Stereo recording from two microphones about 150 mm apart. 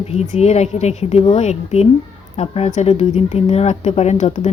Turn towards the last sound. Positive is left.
turn(degrees=50)  # may be behind; listen again after turning